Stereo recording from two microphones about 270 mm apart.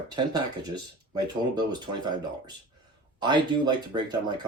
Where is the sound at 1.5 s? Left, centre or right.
Centre.